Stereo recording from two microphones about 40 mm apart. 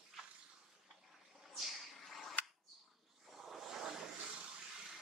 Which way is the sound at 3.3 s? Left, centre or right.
Centre.